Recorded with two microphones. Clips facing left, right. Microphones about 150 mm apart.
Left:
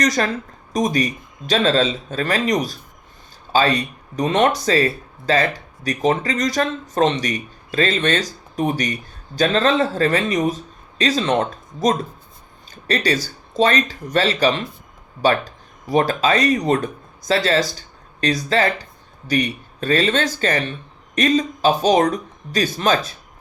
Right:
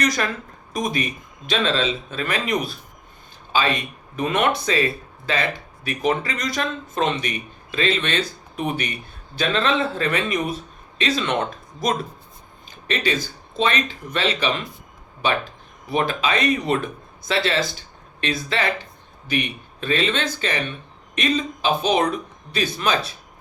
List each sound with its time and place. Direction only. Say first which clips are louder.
0.0 s speech: left 3 dB; 35° left (ahead or behind)
12.7 s a sound: left 4 dB; 40° left (ahead or behind)
13.6 s speech: left 5 dB; 40° left (ahead or behind)